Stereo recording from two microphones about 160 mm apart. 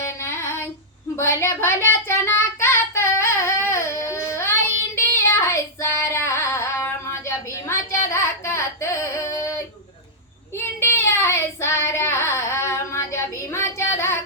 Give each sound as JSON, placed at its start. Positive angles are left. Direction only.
{"t": 0.0, "sound": "child singing", "side_deg": 15}
{"t": 4.9, "sound": "female singing", "side_deg": 15}
{"t": 10.5, "sound": "child singing", "side_deg": 15}